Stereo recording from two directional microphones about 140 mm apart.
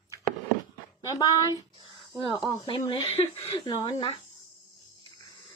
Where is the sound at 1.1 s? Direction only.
25° left (ahead or behind).